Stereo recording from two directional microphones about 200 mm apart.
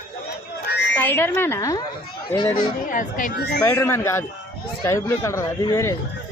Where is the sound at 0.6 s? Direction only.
60° left (ahead or behind).